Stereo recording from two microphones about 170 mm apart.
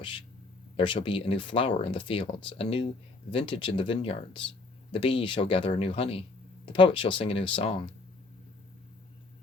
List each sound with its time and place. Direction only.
0.0 s speech: 30° left (ahead or behind)